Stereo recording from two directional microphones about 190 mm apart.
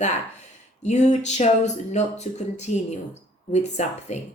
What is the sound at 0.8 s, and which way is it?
Speech, 35° left (ahead or behind).